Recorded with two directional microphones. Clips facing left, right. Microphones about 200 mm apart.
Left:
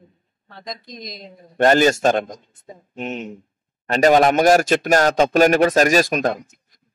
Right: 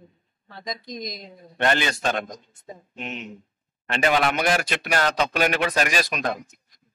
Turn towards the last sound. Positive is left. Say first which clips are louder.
# left 8 dB
turn(degrees=45)  # may be behind; listen again after turning